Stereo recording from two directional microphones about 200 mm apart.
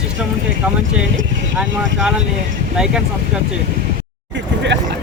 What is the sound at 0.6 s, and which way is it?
Speech, 10° right (ahead or behind).